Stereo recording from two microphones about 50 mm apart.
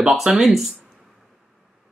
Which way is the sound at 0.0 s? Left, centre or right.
Centre.